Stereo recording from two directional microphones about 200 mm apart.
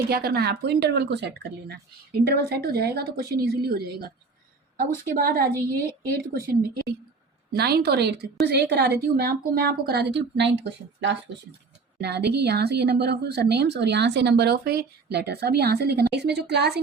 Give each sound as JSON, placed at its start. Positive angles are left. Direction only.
{"t": 0.1, "sound": "a woman's voice", "side_deg": -50}
{"t": 11.9, "sound": "speech", "side_deg": -55}